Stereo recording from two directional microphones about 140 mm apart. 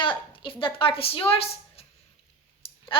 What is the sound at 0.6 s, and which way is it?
A woman's voice, 40° left (ahead or behind).